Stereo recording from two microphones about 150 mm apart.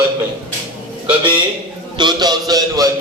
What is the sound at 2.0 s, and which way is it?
Speech, 30° right (ahead or behind).